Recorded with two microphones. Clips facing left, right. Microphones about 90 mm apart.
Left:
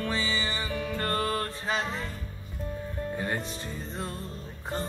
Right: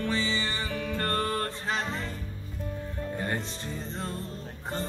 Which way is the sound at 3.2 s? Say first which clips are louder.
Even; 10° left (ahead or behind).